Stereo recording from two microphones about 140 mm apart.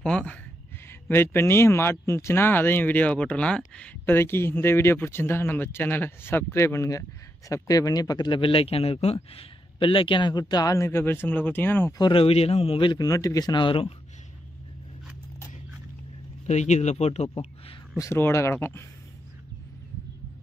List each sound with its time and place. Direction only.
0.0 s speech: 5° left (ahead or behind)
12.0 s a man's voice: 40° left (ahead or behind)
16.4 s speech: 55° left (ahead or behind)
17.9 s speech: 20° left (ahead or behind)